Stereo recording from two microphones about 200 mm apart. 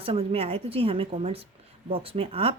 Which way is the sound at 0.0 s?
30° right (ahead or behind).